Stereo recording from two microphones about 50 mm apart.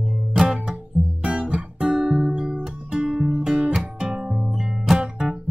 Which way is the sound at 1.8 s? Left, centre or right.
Centre.